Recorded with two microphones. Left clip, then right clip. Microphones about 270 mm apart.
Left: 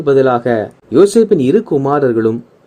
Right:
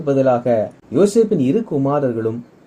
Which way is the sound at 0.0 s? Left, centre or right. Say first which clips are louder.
Left 5 dB; left.